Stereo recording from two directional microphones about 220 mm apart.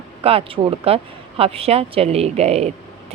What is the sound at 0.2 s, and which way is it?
Speech, 25° right (ahead or behind).